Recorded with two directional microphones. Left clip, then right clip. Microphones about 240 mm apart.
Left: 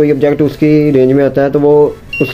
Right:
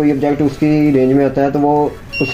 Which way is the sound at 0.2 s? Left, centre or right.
Left.